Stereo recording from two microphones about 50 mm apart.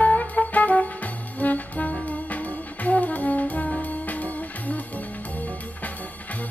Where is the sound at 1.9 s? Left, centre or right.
Left.